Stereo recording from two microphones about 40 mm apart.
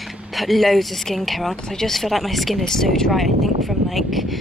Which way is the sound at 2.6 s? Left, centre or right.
Centre.